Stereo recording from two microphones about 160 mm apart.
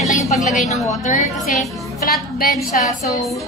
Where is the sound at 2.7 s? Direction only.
55° left (ahead or behind).